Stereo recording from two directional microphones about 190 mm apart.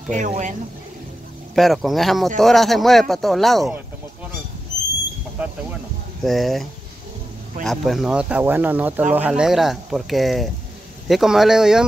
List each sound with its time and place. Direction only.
0.1 s speech: 40° right (ahead or behind)
1.5 s speech: centre (ahead or behind)
5.4 s speech: 10° right (ahead or behind)